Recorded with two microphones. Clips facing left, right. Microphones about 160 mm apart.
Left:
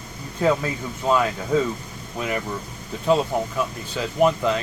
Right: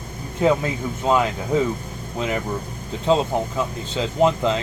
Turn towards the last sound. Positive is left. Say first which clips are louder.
# right 1 dB
turn(degrees=-25)  # may be behind; listen again after turning